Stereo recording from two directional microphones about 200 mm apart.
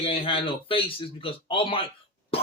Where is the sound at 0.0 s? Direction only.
25° left (ahead or behind).